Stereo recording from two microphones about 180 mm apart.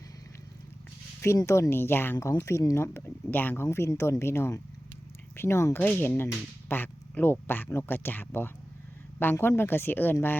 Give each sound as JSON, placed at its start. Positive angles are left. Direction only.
{"t": 1.2, "sound": "speech", "side_deg": 15}